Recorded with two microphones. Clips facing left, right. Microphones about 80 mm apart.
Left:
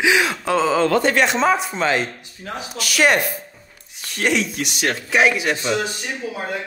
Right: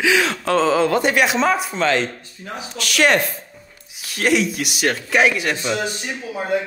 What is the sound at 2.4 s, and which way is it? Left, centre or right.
Speech, left.